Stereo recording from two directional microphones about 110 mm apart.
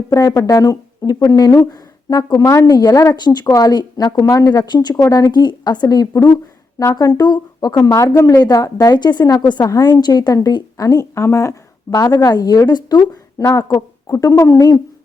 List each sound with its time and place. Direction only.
0.1 s a woman's voice: 30° left (ahead or behind)